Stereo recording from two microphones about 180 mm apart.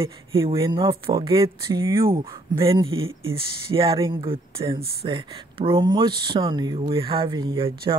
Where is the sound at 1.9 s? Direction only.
30° right (ahead or behind).